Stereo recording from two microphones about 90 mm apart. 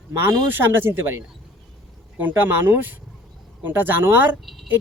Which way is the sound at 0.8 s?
25° right (ahead or behind).